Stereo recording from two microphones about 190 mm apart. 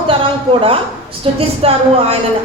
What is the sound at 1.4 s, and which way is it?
Speech, 30° right (ahead or behind).